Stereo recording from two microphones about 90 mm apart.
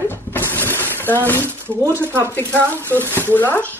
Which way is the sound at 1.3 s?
30° right (ahead or behind).